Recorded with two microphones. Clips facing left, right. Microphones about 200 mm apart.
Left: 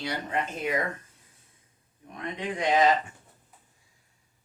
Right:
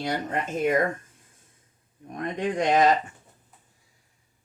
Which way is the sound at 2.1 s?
45° right (ahead or behind).